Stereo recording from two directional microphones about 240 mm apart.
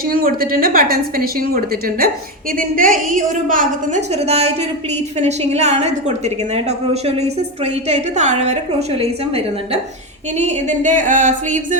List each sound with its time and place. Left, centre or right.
0.1 s a woman's voice: right